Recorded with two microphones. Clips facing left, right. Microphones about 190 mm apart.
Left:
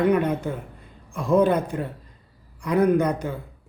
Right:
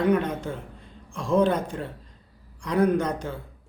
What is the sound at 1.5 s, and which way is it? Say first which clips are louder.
Speech: left 3 dB; 60° left (ahead or behind).